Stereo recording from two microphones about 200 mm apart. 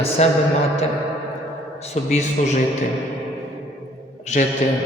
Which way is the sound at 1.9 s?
35° left (ahead or behind).